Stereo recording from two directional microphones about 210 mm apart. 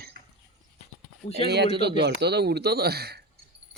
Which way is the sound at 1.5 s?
50° right (ahead or behind).